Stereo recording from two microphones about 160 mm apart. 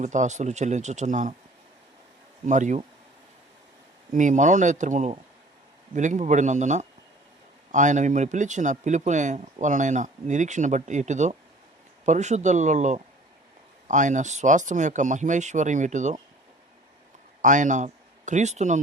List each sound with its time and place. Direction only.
0.0 s speech: 50° right (ahead or behind)
2.5 s speech: 50° right (ahead or behind)
4.1 s speech: 50° right (ahead or behind)
17.4 s speech: 50° right (ahead or behind)